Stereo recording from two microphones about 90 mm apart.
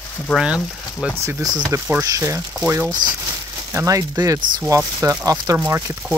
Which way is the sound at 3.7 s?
40° right (ahead or behind).